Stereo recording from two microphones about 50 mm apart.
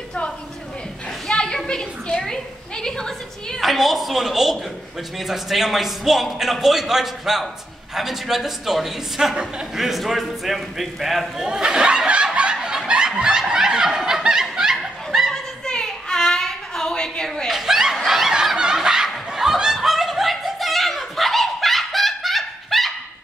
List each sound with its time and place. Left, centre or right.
1.3 s a sound: centre
3.6 s a man's voice: centre
9.3 s a man's voice: centre
9.8 s speech: centre
12.6 s snicker: centre
15.3 s a sound: centre
17.5 s snicker: centre
18.0 s fowl: centre